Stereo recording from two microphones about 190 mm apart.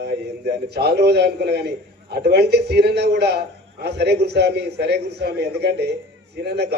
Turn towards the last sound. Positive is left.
turn(degrees=-60)  # may be behind; listen again after turning